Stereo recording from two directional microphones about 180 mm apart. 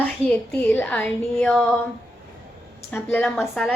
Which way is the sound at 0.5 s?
10° left (ahead or behind).